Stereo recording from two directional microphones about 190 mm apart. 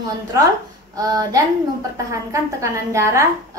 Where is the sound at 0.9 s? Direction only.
20° right (ahead or behind).